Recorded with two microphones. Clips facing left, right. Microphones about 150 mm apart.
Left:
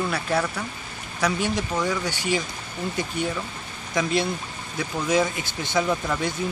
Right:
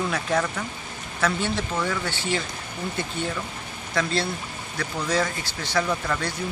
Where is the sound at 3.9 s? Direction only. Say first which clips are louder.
Left 2 dB; 15° left (ahead or behind).